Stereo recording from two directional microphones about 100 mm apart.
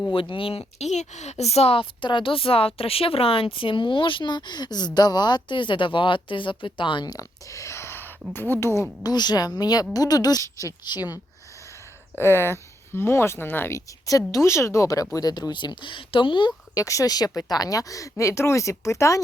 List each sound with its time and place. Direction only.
0.1 s a woman's voice: 60° left (ahead or behind)
1.3 s a woman's voice: 90° left; by 8.9 s 30° left (ahead or behind)
9.0 s speech: 45° left (ahead or behind)
12.1 s speech: 25° left (ahead or behind)
13.7 s speech: 35° left (ahead or behind); by 16.5 s 55° left (ahead or behind)
16.7 s speech: 35° left (ahead or behind)